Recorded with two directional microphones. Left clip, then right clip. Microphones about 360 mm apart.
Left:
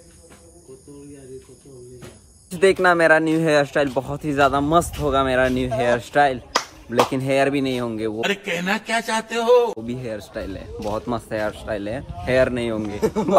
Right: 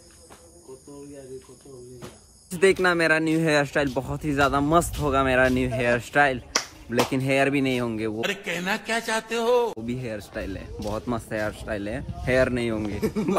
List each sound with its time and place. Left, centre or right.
2.5 s speech: centre
13.0 s speech: left